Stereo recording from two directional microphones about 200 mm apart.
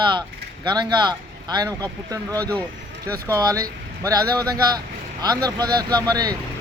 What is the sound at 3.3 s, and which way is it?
Speech, 15° right (ahead or behind).